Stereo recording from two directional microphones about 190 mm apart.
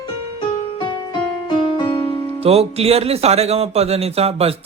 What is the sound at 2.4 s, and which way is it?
Speech, 30° right (ahead or behind).